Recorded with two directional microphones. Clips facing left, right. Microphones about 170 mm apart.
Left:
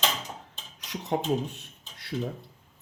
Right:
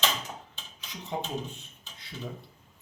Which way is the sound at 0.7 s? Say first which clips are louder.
Left 6 dB; 75° left (ahead or behind).